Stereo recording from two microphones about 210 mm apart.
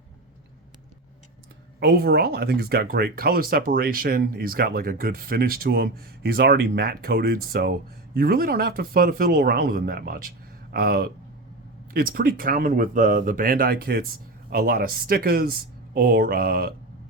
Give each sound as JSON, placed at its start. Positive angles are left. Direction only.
{"t": 1.8, "sound": "speech", "side_deg": -45}